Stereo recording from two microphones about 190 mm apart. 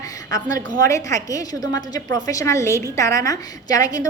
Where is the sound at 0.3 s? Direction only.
20° left (ahead or behind).